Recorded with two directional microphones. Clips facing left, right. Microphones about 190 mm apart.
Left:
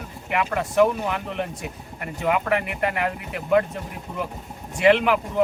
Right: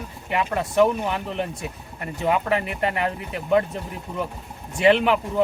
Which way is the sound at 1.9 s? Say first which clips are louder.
Right 1 dB; 30° right (ahead or behind).